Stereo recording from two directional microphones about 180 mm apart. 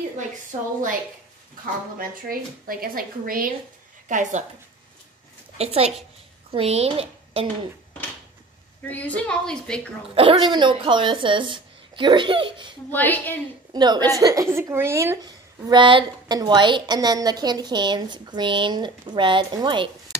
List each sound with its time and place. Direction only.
0.5 s speech: 40° right (ahead or behind)
2.0 s speech: 55° right (ahead or behind)
4.1 s speech: 40° right (ahead or behind)
5.6 s speech: 35° right (ahead or behind)
8.8 s a woman's voice: 10° left (ahead or behind)
10.1 s speech: 30° right (ahead or behind)
12.9 s a woman's voice: 10° left (ahead or behind)
13.7 s speech: 25° right (ahead or behind)
20.1 s a sound: 20° right (ahead or behind)